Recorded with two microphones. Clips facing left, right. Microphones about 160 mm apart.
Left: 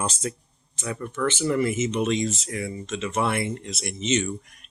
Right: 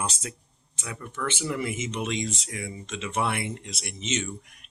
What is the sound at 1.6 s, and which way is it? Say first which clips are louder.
Speech: left 7 dB; 50° left (ahead or behind).